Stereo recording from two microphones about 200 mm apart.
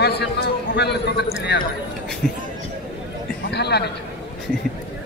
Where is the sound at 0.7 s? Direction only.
55° left (ahead or behind).